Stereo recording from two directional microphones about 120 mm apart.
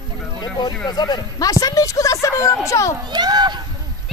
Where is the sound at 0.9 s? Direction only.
35° left (ahead or behind).